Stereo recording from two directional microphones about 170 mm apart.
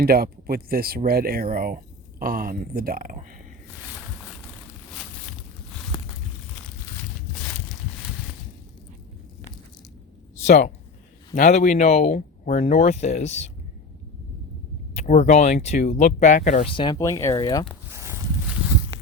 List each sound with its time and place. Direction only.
0.0 s speech: 65° right (ahead or behind)
10.4 s speech: 45° left (ahead or behind)
14.9 s speech: 45° left (ahead or behind)
16.7 s speech: 25° left (ahead or behind)
17.8 s a sound: 15° right (ahead or behind)